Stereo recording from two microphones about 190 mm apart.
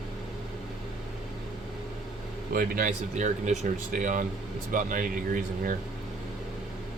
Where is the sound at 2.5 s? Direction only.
50° right (ahead or behind).